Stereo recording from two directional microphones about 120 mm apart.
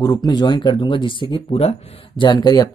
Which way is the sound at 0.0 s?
30° left (ahead or behind).